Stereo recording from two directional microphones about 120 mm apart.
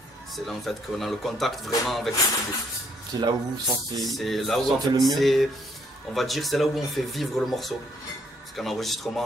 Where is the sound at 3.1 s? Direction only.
35° right (ahead or behind).